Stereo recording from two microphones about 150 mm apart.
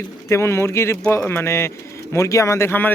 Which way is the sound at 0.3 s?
20° left (ahead or behind).